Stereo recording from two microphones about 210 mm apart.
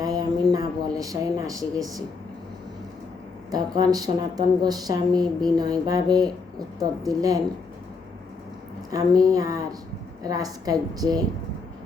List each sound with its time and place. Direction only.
0.0 s a sound: 15° right (ahead or behind)
0.5 s a woman's voice: 15° right (ahead or behind)
3.5 s a woman's voice: 20° right (ahead or behind)
8.9 s a woman's voice: 15° right (ahead or behind)